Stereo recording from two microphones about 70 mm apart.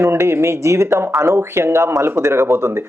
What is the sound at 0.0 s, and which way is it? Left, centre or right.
Speech, right.